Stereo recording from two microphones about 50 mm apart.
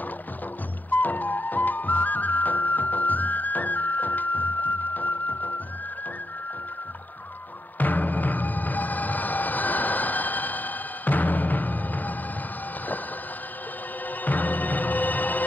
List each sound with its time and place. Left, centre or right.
0.8 s music: left
7.8 s music: left
14.2 s music: left